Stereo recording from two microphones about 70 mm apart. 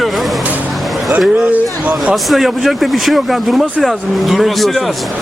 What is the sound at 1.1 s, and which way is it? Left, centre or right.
Speech, centre.